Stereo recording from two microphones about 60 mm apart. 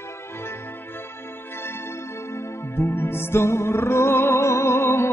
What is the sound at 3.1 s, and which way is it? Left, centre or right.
Music, left.